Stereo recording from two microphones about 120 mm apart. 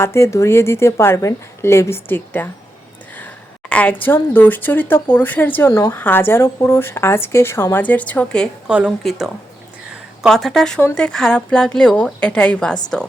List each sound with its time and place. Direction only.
0.0 s speech: 25° left (ahead or behind)
3.2 s a sound: 15° left (ahead or behind)
4.0 s a woman's voice: 15° left (ahead or behind)
8.6 s a woman's voice: 5° right (ahead or behind)
9.9 s a sound: centre (ahead or behind)
10.9 s a woman's voice: 5° left (ahead or behind)